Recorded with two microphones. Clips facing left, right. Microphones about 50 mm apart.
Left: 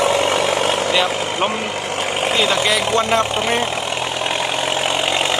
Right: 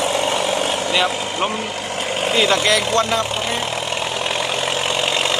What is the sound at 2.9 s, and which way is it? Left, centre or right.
Speech, centre.